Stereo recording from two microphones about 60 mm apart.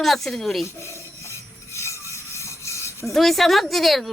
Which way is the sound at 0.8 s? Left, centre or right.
Left.